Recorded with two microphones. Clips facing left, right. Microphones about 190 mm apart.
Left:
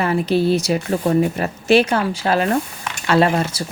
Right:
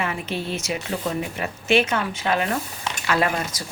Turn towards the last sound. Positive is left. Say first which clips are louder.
# left 7 dB
turn(degrees=30)  # may be behind; listen again after turning